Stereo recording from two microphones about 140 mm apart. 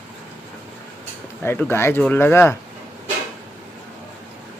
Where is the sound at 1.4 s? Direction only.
15° left (ahead or behind).